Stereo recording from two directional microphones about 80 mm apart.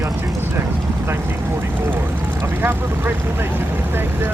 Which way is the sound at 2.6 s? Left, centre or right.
Right.